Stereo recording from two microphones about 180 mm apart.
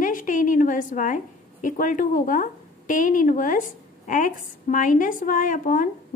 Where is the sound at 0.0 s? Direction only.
45° left (ahead or behind).